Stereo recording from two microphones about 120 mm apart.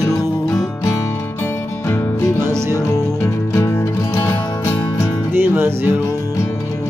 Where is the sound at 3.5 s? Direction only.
25° left (ahead or behind).